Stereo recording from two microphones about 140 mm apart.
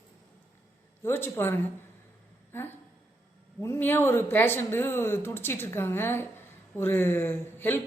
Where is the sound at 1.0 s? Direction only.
15° left (ahead or behind).